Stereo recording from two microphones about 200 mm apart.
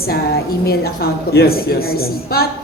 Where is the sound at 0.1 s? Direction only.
50° left (ahead or behind).